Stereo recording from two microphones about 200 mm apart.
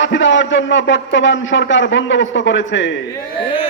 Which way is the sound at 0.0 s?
65° left (ahead or behind).